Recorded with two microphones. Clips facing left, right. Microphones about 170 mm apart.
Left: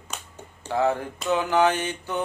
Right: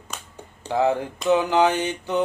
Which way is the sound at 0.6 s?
15° right (ahead or behind).